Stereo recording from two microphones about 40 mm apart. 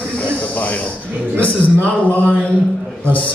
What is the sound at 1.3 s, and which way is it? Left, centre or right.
A man's voice, left.